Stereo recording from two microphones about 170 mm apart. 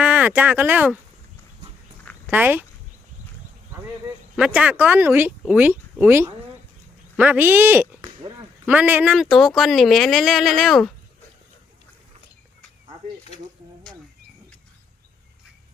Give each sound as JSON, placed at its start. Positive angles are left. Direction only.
{"t": 0.0, "sound": "speech", "side_deg": -10}
{"t": 2.3, "sound": "speech", "side_deg": -10}
{"t": 4.4, "sound": "speech", "side_deg": -5}